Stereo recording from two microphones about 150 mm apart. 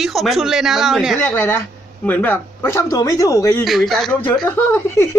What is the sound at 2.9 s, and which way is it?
Speech, 25° left (ahead or behind).